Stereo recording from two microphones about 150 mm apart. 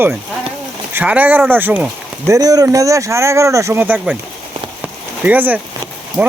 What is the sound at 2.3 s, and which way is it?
Speech, 25° right (ahead or behind).